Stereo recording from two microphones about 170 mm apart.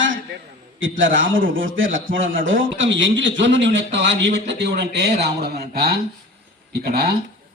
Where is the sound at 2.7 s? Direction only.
90° right.